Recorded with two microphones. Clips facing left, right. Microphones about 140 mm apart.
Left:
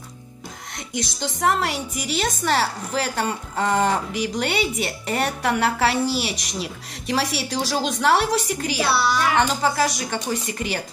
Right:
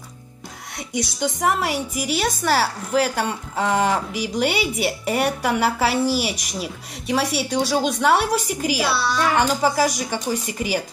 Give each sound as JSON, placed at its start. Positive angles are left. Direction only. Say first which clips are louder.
{"t": 1.2, "sound": "a woman's voice", "louder": "even", "side_deg": -5}